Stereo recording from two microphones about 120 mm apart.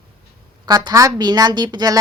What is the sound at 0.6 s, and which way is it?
Speech, 35° right (ahead or behind).